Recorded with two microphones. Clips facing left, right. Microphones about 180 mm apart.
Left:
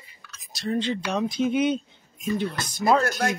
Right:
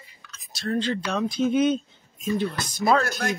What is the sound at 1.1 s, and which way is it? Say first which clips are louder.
Speech: right 1 dB; 15° left (ahead or behind).